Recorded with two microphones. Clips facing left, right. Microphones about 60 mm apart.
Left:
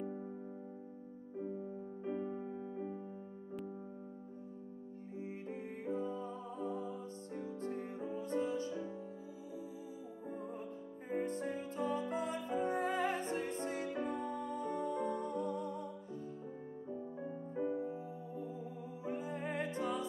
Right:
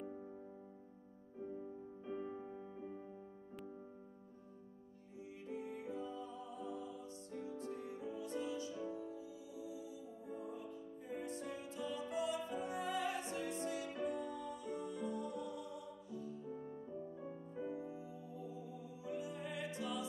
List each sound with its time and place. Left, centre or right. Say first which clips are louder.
2.0 s music: left 5 dB; left
5.2 s music: left 1 dB; left
10.3 s music: left 2 dB; left